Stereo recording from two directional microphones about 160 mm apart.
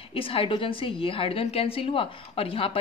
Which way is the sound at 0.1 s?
35° left (ahead or behind).